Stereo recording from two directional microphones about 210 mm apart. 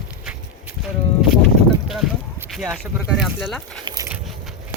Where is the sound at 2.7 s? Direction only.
Centre (ahead or behind).